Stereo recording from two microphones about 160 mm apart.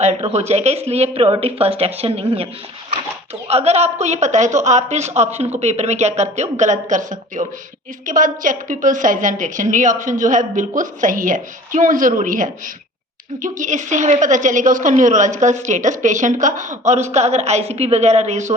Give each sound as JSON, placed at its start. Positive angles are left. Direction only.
{"t": 0.0, "sound": "speech", "side_deg": -45}
{"t": 3.5, "sound": "a woman's voice", "side_deg": -40}